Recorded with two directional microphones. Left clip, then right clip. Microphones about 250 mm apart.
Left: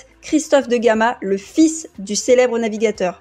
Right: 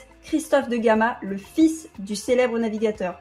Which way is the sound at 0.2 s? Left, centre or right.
Left.